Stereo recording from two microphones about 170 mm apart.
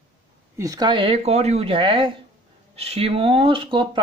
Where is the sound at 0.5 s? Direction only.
20° right (ahead or behind).